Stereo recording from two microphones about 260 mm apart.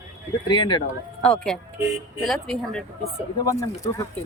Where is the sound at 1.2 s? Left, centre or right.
Centre.